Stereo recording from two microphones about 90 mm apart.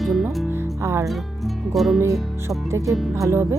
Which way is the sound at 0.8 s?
30° right (ahead or behind).